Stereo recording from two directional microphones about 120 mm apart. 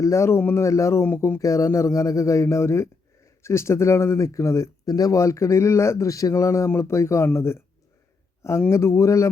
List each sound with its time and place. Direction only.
0.0 s speech: 25° left (ahead or behind)
8.7 s speech: 25° left (ahead or behind)